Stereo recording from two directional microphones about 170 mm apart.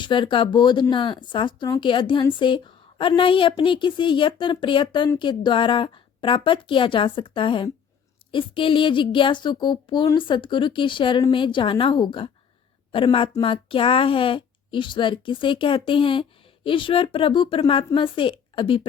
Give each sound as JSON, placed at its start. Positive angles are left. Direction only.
{"t": 0.0, "sound": "speech", "side_deg": 30}